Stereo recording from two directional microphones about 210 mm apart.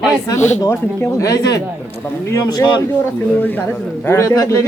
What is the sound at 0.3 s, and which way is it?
Speech, 35° left (ahead or behind).